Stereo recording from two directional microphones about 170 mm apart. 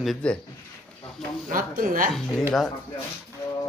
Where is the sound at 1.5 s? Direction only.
55° right (ahead or behind).